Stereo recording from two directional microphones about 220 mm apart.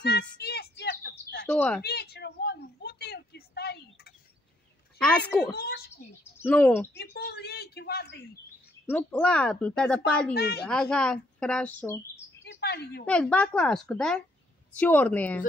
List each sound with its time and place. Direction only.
0.0 s a sound: 50° left (ahead or behind)
1.5 s a woman's voice: 5° left (ahead or behind)
1.8 s a sound: 45° left (ahead or behind)
5.5 s a child's voice: 45° left (ahead or behind)
6.3 s speech: 5° left (ahead or behind)
6.9 s a sound: 45° left (ahead or behind)
8.8 s a woman's voice: 5° left (ahead or behind)
10.3 s a woman's voice: 45° left (ahead or behind)
10.7 s a woman's voice: 5° left (ahead or behind)
12.4 s bird: 50° left (ahead or behind)
13.0 s a woman's voice: 5° left (ahead or behind)